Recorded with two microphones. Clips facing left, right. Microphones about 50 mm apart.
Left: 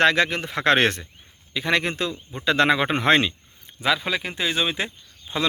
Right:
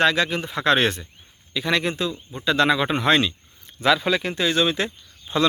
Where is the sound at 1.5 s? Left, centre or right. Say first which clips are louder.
Even; left.